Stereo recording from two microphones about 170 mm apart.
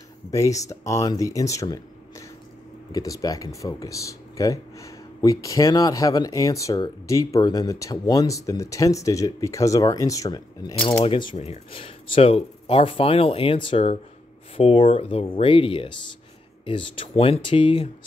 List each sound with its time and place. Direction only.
0.3 s speech: 20° left (ahead or behind)
11.3 s speech: 40° left (ahead or behind)